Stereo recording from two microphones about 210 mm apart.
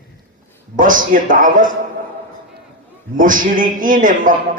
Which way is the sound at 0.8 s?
40° right (ahead or behind).